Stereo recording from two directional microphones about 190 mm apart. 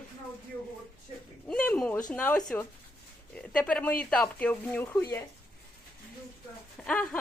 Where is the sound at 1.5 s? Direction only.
5° left (ahead or behind).